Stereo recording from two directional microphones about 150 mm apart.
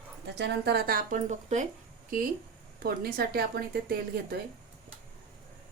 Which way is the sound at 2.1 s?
70° right (ahead or behind).